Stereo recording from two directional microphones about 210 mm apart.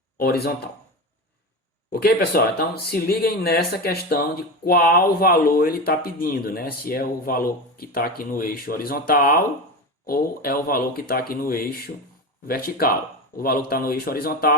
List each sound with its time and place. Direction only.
0.2 s speech: 45° left (ahead or behind)
1.9 s speech: 45° left (ahead or behind)